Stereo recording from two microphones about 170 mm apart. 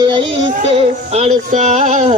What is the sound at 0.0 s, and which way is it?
Child singing, 30° right (ahead or behind).